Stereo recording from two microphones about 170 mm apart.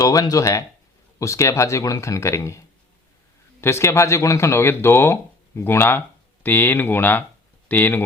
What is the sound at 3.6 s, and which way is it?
Speech, 15° left (ahead or behind).